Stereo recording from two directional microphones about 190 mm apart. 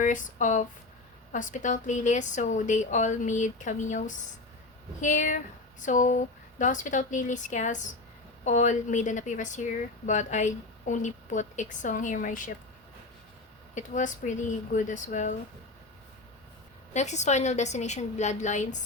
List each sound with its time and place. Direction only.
0.0 s speech: 40° left (ahead or behind)
13.7 s speech: 40° left (ahead or behind)
16.9 s speech: 40° left (ahead or behind)